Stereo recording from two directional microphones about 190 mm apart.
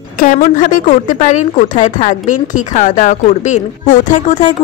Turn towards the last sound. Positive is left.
turn(degrees=40)  # may be behind; listen again after turning